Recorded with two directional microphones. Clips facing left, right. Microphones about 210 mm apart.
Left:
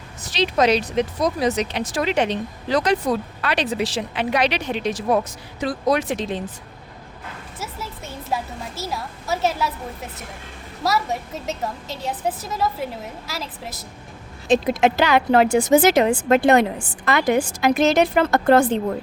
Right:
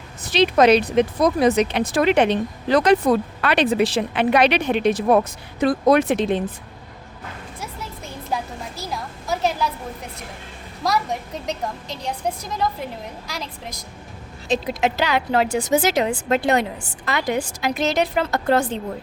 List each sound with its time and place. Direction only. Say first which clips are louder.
0.2 s speech: right 4 dB; 55° right (ahead or behind)
7.6 s a woman's voice: left 2 dB; centre (ahead or behind)
10.8 s a woman's voice: even; 5° left (ahead or behind)
14.4 s speech: left 4 dB; 50° left (ahead or behind)